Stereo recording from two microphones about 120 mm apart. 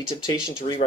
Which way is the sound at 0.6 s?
70° left (ahead or behind).